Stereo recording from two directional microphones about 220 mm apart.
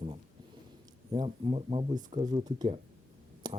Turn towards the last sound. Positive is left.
turn(degrees=-20)  # may be behind; listen again after turning